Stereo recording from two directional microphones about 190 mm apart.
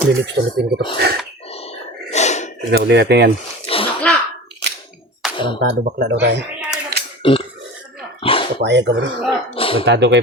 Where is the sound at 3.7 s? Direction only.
30° left (ahead or behind).